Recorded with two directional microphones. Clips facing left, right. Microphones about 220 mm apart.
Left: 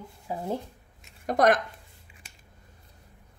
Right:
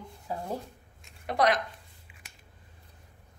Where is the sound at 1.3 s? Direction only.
50° left (ahead or behind).